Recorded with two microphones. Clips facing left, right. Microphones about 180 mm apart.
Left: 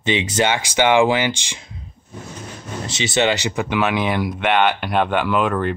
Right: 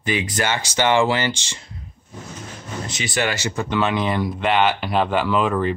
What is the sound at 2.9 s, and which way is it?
Speech, 25° left (ahead or behind).